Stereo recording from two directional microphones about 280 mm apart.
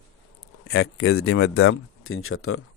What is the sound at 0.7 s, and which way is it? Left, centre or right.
Speech, left.